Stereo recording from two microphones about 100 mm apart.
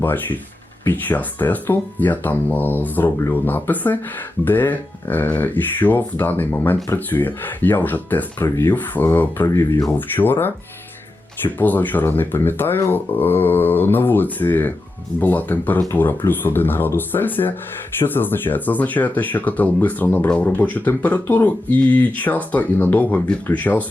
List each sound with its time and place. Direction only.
0.0 s speech: 20° left (ahead or behind)